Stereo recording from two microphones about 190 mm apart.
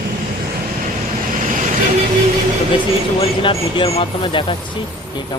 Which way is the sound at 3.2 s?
30° left (ahead or behind).